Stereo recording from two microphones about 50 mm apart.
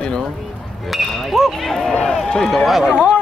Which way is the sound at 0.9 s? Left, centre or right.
Centre.